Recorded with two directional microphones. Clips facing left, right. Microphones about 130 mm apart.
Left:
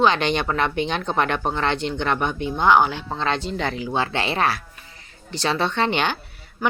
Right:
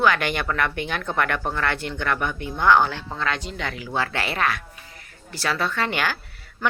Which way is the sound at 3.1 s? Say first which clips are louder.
Left 3 dB; 25° left (ahead or behind).